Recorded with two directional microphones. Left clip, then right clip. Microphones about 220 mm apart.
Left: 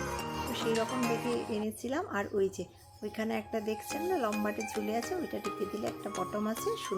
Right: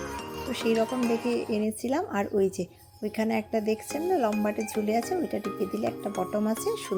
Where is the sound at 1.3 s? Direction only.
20° right (ahead or behind).